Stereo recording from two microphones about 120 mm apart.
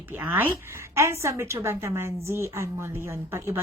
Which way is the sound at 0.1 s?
15° right (ahead or behind).